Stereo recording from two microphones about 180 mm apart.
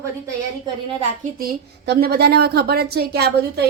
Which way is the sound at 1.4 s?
60° right (ahead or behind).